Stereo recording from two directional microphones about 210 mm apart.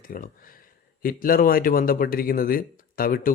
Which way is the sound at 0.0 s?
45° left (ahead or behind).